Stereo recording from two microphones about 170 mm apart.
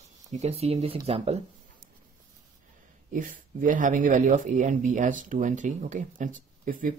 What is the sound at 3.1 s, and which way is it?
Speech, 50° right (ahead or behind).